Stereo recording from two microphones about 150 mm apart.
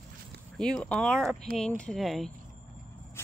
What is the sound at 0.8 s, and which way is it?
Speech, 5° left (ahead or behind).